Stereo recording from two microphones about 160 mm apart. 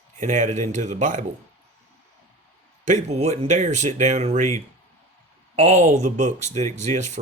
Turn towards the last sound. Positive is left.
turn(degrees=-45)  # may be behind; listen again after turning